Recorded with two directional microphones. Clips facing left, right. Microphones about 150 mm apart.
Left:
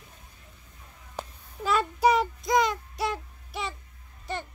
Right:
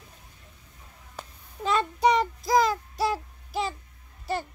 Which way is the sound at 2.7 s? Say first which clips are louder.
Right 3 dB; 30° right (ahead or behind).